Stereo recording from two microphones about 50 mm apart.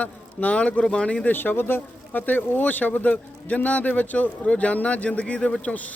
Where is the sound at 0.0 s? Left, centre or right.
Left.